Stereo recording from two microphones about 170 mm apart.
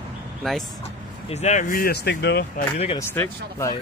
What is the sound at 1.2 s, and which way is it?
Speech, 40° left (ahead or behind).